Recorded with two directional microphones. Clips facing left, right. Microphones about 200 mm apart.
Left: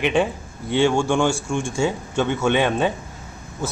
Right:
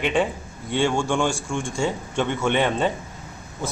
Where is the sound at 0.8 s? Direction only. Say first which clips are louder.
Left 3 dB; 10° left (ahead or behind).